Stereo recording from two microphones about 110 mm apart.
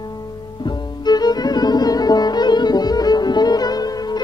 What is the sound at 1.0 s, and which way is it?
Music, 40° left (ahead or behind).